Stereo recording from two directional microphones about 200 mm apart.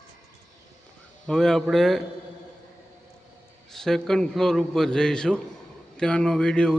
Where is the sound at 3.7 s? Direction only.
Centre (ahead or behind).